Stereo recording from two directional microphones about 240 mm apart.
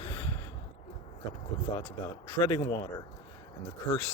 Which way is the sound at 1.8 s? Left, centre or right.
Centre.